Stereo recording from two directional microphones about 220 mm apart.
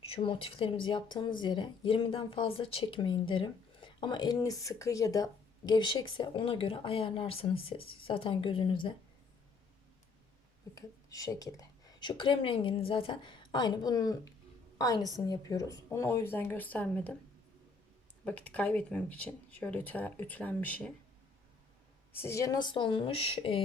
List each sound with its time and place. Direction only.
0.1 s speech: 25° left (ahead or behind)
10.8 s a woman's voice: 15° left (ahead or behind)
18.3 s speech: 5° left (ahead or behind)
22.1 s speech: 10° left (ahead or behind)